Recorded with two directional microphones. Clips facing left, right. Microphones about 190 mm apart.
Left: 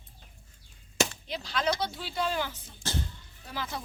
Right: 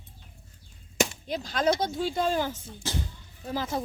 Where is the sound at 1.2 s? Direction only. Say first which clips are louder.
Right 5 dB; 45° right (ahead or behind).